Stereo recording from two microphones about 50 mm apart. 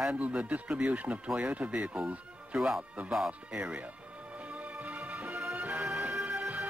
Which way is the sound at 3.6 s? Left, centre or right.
Right.